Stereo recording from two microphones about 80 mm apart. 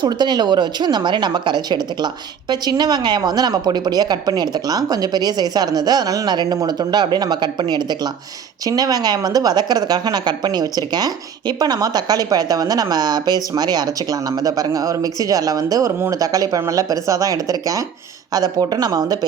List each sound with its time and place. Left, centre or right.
0.0 s a woman's voice: right